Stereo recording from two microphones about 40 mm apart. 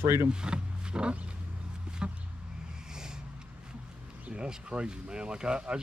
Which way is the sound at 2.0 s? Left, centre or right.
Right.